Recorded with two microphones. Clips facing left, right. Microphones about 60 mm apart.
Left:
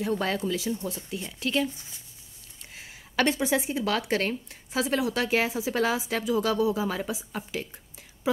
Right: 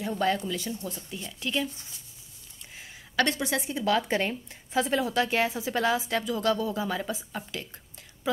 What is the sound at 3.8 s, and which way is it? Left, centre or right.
A woman's voice, centre.